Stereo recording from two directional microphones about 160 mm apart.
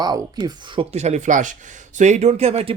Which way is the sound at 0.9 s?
45° right (ahead or behind).